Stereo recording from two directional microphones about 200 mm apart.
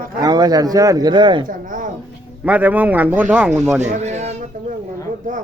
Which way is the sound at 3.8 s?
35° right (ahead or behind).